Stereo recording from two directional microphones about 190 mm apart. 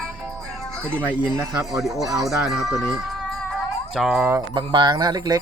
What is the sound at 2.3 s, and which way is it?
Speech, centre (ahead or behind).